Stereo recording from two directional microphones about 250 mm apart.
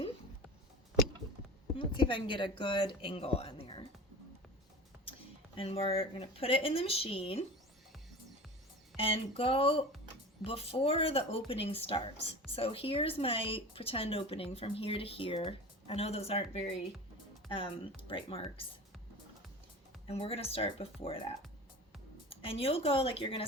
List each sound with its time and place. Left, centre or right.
1.7 s speech: centre
5.5 s speech: left
9.0 s speech: left
20.1 s speech: left
22.3 s speech: left